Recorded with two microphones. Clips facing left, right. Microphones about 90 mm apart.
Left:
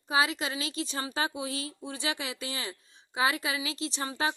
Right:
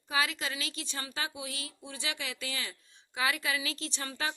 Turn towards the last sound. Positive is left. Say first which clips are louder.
# left 5 dB
turn(degrees=25)  # may be behind; listen again after turning